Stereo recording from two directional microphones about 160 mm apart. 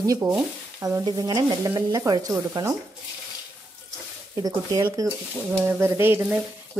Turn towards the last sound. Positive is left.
turn(degrees=-15)  # may be behind; listen again after turning